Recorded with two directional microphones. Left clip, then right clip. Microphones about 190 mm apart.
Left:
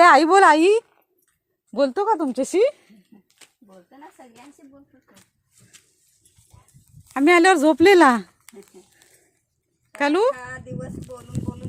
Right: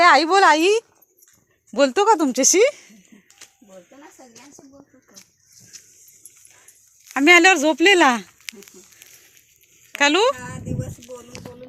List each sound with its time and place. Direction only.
0.0 s speech: 35° left (ahead or behind)
1.9 s speech: 10° right (ahead or behind)
7.1 s speech: 15° left (ahead or behind)
9.9 s speech: 20° left (ahead or behind)